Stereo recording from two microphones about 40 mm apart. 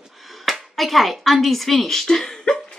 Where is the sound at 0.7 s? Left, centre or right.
Centre.